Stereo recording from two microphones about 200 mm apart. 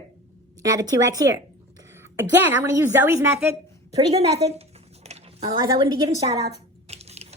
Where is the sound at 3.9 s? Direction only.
30° right (ahead or behind).